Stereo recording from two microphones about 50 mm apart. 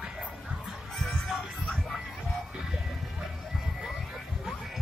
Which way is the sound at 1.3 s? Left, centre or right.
Centre.